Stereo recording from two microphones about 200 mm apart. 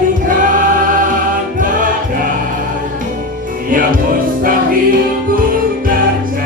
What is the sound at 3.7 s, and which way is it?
Music, 45° right (ahead or behind).